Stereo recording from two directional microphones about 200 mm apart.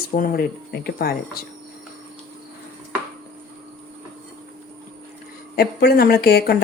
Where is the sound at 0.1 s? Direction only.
45° left (ahead or behind).